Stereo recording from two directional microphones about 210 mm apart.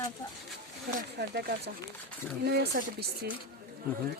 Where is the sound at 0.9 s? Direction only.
50° right (ahead or behind).